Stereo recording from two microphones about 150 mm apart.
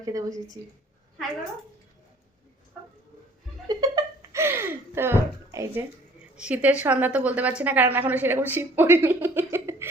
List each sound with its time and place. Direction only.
0.0 s a woman's voice: 25° right (ahead or behind)
3.8 s a sound: 25° right (ahead or behind)
6.3 s a woman's voice: 10° right (ahead or behind)